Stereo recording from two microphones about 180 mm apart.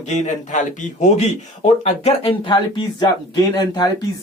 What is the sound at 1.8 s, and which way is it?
Speech, 35° left (ahead or behind).